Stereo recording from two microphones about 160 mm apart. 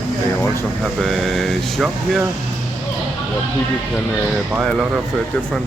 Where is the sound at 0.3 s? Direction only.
15° left (ahead or behind).